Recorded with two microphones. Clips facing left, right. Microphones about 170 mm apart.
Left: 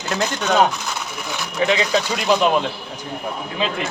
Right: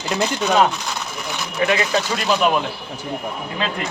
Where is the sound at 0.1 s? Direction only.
5° right (ahead or behind).